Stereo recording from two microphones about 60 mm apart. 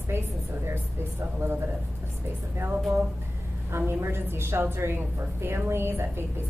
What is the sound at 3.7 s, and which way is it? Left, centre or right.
A woman's voice, right.